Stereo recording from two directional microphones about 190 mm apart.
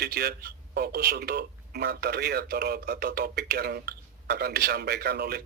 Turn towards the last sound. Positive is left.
turn(degrees=-55)  # may be behind; listen again after turning